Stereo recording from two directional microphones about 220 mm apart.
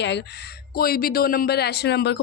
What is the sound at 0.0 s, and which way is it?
Speech, 50° left (ahead or behind).